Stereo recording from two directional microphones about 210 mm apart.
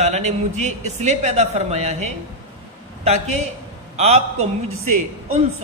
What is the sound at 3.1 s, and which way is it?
Speech, 30° right (ahead or behind).